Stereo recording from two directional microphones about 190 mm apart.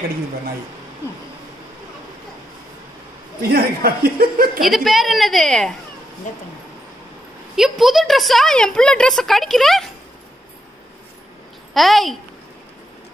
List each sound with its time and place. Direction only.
3.5 s a woman's voice: 50° right (ahead or behind)
4.6 s a woman's voice: centre (ahead or behind)
7.5 s a woman's voice: centre (ahead or behind)
11.7 s a woman's voice: centre (ahead or behind)